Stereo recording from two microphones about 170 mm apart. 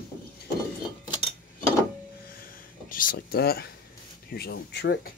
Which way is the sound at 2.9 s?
55° left (ahead or behind).